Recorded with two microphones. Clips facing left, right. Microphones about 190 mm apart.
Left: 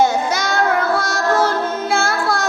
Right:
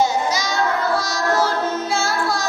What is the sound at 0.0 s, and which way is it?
Child singing, 55° left (ahead or behind).